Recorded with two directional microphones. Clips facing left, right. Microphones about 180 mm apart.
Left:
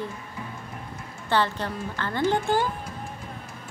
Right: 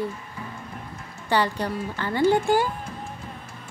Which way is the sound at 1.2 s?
10° right (ahead or behind).